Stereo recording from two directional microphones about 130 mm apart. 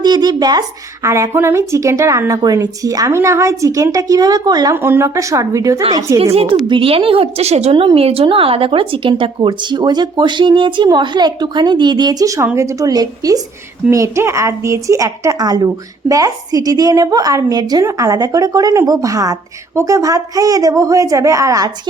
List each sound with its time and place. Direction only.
0.0 s a woman's voice: 30° right (ahead or behind)
4.7 s a woman's voice: 20° right (ahead or behind)
6.3 s a woman's voice: 50° right (ahead or behind); by 21.7 s 25° right (ahead or behind)